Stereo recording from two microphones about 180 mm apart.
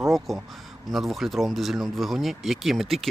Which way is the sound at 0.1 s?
Centre (ahead or behind).